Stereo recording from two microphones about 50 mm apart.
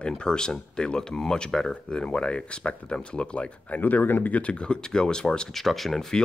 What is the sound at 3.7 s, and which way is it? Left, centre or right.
Speech, left.